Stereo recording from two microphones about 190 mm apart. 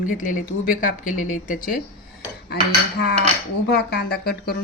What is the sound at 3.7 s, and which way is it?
Speech, 55° left (ahead or behind).